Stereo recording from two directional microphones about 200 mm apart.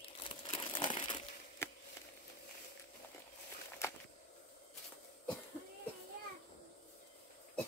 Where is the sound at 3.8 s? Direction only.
15° left (ahead or behind).